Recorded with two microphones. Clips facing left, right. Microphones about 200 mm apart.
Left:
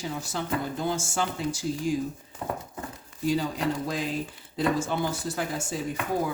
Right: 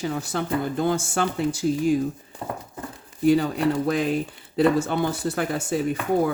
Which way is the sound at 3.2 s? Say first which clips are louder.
Right 7 dB; 60° right (ahead or behind).